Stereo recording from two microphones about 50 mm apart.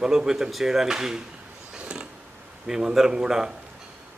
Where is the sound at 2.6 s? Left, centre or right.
Centre.